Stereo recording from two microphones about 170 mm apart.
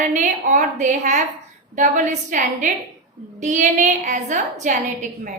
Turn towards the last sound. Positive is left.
turn(degrees=-45)  # may be behind; listen again after turning